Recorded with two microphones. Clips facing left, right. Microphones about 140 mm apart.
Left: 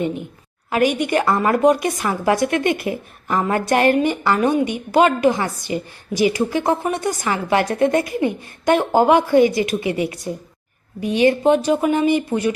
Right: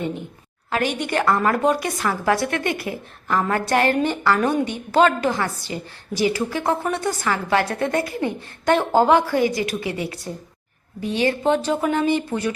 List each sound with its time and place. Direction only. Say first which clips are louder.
0.7 s a woman's voice: left 5 dB; 15° left (ahead or behind)